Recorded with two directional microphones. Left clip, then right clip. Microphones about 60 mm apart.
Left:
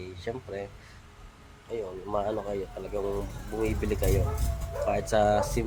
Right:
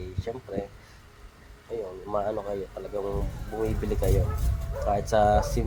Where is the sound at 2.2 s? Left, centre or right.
Centre.